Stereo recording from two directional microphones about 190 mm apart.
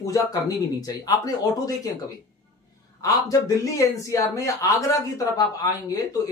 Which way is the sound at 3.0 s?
20° left (ahead or behind).